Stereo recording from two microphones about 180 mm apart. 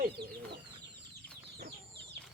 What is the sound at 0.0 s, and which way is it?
Chicken, 65° right (ahead or behind).